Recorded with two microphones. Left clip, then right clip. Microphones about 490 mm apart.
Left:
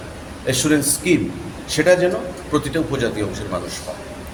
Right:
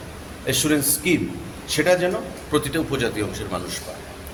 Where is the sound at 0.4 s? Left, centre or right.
Right.